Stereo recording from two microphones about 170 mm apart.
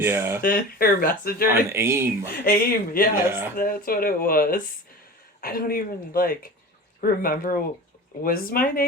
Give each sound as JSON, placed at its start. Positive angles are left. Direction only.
{"t": 0.0, "sound": "speech", "side_deg": -15}
{"t": 0.4, "sound": "speech", "side_deg": 60}
{"t": 1.7, "sound": "speech", "side_deg": -15}
{"t": 2.4, "sound": "speech", "side_deg": 55}
{"t": 3.2, "sound": "speech", "side_deg": -15}
{"t": 3.6, "sound": "speech", "side_deg": 55}